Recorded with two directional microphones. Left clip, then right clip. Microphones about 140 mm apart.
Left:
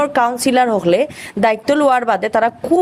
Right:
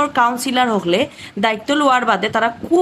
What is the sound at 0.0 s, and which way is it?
Speech, 30° left (ahead or behind).